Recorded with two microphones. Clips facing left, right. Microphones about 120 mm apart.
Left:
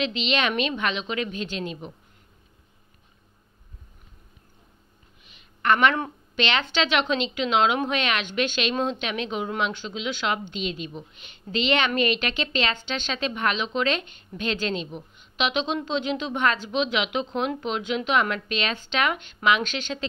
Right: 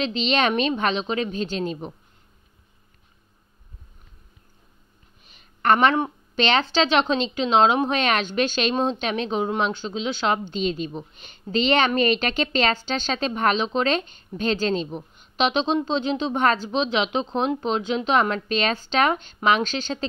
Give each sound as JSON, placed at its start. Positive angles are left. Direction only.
{"t": 0.0, "sound": "a woman's voice", "side_deg": -35}
{"t": 5.2, "sound": "a sound", "side_deg": -40}
{"t": 6.3, "sound": "a woman's voice", "side_deg": -35}